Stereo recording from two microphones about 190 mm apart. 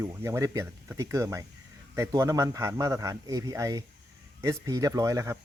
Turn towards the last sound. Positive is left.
turn(degrees=-15)  # may be behind; listen again after turning